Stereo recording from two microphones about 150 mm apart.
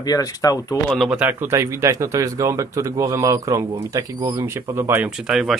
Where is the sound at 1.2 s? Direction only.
15° right (ahead or behind).